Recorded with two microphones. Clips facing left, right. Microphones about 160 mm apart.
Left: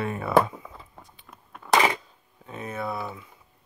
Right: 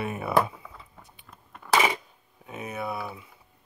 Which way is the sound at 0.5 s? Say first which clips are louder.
Left 4 dB; 30° left (ahead or behind).